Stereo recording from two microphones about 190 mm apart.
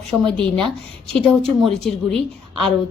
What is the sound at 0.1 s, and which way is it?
Speech, 5° right (ahead or behind).